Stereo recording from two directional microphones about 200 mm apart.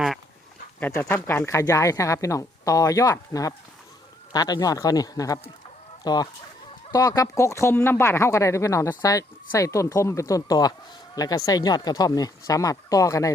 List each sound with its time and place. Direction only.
0.8 s speech: 10° left (ahead or behind)
6.0 s chicken: 20° left (ahead or behind)
6.9 s speech: 20° left (ahead or behind)